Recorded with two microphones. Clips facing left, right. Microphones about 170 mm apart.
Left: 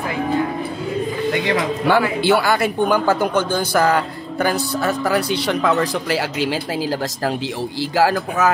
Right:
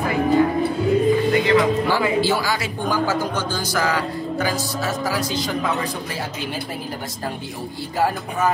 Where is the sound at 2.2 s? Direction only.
60° left (ahead or behind).